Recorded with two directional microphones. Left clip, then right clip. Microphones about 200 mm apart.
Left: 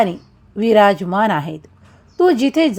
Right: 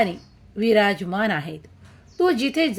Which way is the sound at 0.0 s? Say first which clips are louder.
Left 5 dB; 20° left (ahead or behind).